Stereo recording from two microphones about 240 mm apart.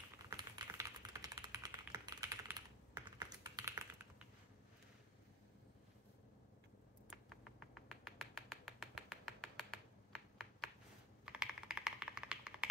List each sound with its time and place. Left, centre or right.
0.3 s typing: centre
7.9 s finger snapping: centre
11.2 s typing: centre